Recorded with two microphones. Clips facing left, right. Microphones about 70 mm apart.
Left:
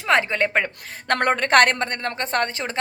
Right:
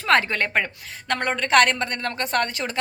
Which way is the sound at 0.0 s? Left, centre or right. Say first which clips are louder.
Even; centre.